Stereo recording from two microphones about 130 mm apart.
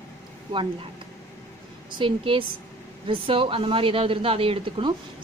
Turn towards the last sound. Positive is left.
turn(degrees=-40)  # may be behind; listen again after turning